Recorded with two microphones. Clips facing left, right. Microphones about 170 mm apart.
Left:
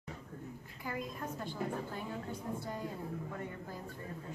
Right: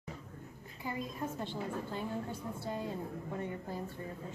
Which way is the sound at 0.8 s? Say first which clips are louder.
Right 2 dB; 25° right (ahead or behind).